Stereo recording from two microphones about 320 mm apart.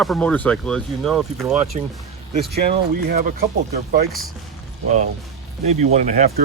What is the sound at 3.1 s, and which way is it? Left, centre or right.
Speech, right.